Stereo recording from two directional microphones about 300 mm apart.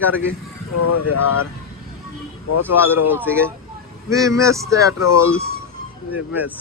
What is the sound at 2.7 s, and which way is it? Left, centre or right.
Speech, centre.